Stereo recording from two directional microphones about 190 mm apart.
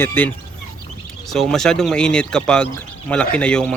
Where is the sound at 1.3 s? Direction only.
Centre (ahead or behind).